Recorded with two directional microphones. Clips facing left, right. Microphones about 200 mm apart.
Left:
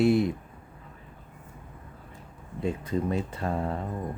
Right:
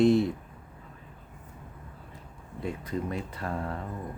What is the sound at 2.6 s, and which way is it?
Speech, 25° left (ahead or behind).